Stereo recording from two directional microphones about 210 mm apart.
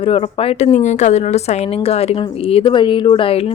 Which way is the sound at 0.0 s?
25° left (ahead or behind).